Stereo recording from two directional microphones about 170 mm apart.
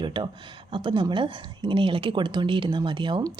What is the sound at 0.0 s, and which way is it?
A woman's voice, 25° right (ahead or behind).